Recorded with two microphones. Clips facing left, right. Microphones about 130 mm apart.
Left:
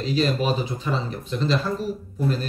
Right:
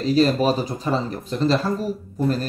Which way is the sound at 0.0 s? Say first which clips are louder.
Right 5 dB; 40° right (ahead or behind).